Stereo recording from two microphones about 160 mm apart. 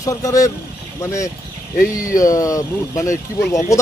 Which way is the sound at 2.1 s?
20° left (ahead or behind).